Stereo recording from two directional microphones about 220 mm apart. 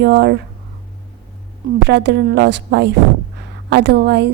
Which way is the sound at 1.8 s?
50° right (ahead or behind).